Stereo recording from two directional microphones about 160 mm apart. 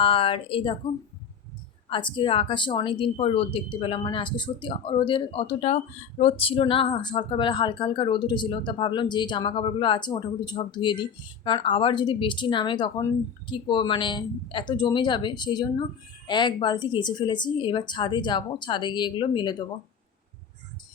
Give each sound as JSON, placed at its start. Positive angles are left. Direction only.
{"t": 0.0, "sound": "speech", "side_deg": 35}
{"t": 1.9, "sound": "speech", "side_deg": 30}